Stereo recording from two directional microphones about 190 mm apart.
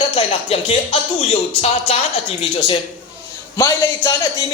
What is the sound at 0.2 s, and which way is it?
Speech, 30° left (ahead or behind).